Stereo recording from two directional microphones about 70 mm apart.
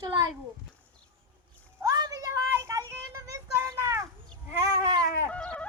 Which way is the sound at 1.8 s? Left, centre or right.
Right.